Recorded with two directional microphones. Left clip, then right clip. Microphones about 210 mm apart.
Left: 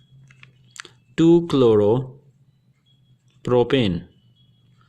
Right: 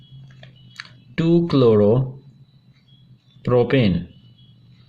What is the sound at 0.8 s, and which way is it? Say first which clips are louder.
Speech: left 6 dB; 50° left (ahead or behind).